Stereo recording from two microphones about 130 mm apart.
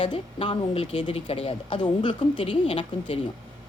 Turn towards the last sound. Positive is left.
turn(degrees=45)  # may be behind; listen again after turning